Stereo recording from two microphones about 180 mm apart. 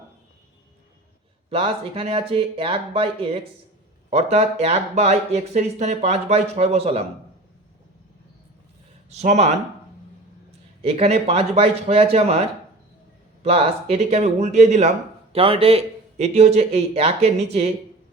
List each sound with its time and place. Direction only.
1.5 s speech: 30° right (ahead or behind)
9.0 s speech: 40° right (ahead or behind)
10.8 s speech: 35° right (ahead or behind)